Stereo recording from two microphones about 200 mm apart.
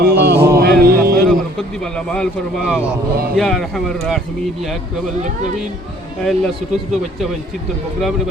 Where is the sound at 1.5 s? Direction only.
5° left (ahead or behind).